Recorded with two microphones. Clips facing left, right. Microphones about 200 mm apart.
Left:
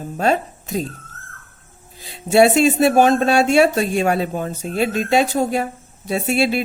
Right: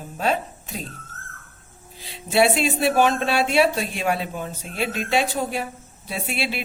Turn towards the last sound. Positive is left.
turn(degrees=45)  # may be behind; listen again after turning